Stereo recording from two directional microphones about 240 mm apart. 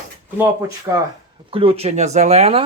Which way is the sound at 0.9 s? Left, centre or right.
Centre.